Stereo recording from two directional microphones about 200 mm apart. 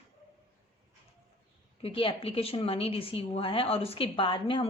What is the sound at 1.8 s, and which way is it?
A woman's voice, 25° left (ahead or behind).